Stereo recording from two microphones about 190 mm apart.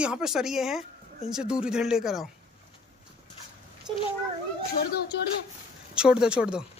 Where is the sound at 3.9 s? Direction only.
20° right (ahead or behind).